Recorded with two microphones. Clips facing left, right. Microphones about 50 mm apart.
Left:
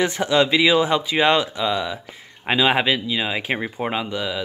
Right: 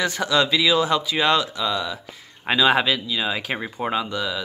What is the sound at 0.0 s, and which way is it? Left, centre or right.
Speech, left.